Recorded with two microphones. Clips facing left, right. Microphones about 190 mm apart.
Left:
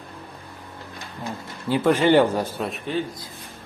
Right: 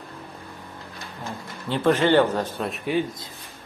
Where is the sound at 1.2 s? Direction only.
10° left (ahead or behind).